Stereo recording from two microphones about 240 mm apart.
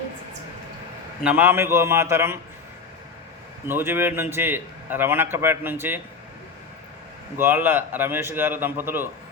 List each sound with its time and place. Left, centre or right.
1.2 s a man's voice: centre
3.7 s a man's voice: centre
7.3 s a man's voice: centre